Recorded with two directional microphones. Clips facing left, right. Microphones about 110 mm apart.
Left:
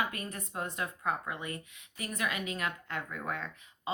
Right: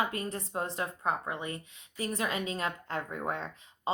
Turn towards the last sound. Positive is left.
turn(degrees=-30)  # may be behind; listen again after turning